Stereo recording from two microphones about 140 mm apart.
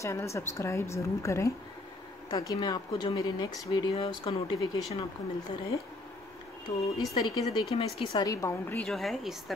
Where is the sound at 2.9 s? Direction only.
45° left (ahead or behind).